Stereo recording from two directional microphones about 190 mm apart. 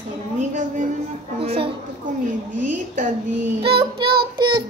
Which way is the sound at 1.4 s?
30° right (ahead or behind).